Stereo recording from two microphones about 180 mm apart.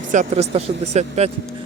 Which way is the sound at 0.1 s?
40° right (ahead or behind).